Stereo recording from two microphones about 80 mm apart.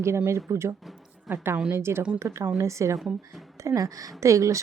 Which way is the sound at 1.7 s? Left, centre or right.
Right.